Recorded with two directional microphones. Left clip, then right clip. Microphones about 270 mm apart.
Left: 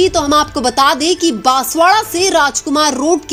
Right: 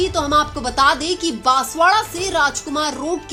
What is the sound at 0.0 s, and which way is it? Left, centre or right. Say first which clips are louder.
A woman's voice: left 5 dB; left.